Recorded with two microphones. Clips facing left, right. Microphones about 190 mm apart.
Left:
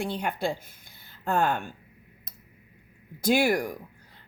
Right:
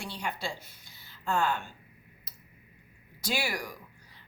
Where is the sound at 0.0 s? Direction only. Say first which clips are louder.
Left 8 dB; 55° left (ahead or behind).